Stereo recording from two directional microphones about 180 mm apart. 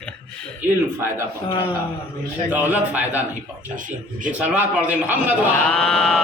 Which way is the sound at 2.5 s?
10° right (ahead or behind).